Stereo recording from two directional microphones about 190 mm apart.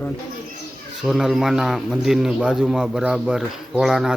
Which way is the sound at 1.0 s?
Centre (ahead or behind).